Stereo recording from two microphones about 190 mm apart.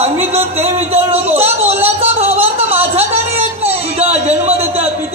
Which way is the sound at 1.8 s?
30° right (ahead or behind).